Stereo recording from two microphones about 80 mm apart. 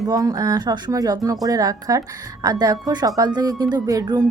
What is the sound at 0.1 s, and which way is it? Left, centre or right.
A woman's voice, right.